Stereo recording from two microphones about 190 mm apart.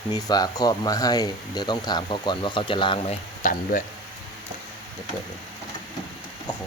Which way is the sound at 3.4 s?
45° left (ahead or behind).